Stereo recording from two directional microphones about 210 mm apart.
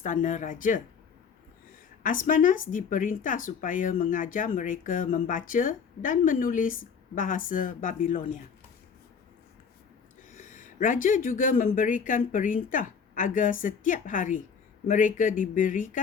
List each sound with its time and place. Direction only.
0.0 s speech: 35° left (ahead or behind)
2.0 s speech: 40° left (ahead or behind)
10.5 s speech: 40° left (ahead or behind)